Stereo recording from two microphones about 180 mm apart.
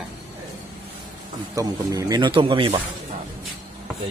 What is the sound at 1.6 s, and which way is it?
Speech, 20° right (ahead or behind).